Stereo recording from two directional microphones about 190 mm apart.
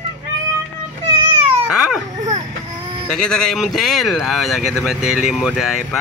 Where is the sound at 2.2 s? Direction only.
40° right (ahead or behind).